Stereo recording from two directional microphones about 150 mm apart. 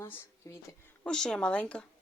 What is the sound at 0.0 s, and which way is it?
Speech, 20° left (ahead or behind).